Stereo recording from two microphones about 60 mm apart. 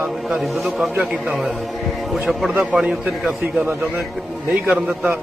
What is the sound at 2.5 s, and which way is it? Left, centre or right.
Speech, right.